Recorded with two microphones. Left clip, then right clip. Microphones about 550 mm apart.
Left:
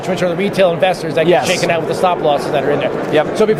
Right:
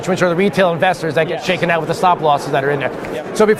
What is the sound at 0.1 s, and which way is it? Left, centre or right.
A man's voice, right.